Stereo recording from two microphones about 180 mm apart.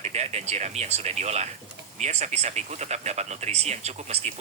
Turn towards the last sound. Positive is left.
turn(degrees=-35)  # may be behind; listen again after turning